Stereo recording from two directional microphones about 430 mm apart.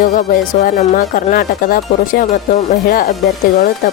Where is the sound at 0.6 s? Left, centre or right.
Centre.